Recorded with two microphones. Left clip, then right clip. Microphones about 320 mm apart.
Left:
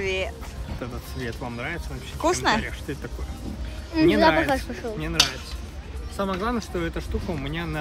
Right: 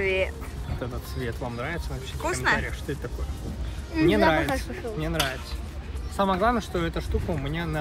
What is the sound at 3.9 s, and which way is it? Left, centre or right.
Speech, left.